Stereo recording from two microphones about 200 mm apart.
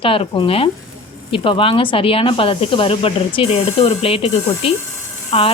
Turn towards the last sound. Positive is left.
turn(degrees=30)  # may be behind; listen again after turning